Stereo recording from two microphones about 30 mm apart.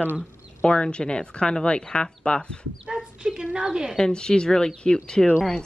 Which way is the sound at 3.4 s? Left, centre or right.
Right.